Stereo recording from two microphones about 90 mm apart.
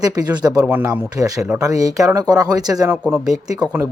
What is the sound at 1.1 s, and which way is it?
Speech, 40° right (ahead or behind).